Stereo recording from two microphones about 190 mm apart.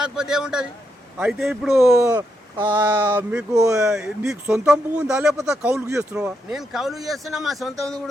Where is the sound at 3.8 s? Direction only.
5° right (ahead or behind).